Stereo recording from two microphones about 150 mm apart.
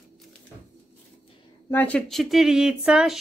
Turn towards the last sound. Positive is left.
turn(degrees=-5)  # may be behind; listen again after turning